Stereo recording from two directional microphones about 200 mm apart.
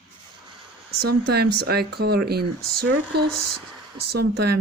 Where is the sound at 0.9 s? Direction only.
50° right (ahead or behind).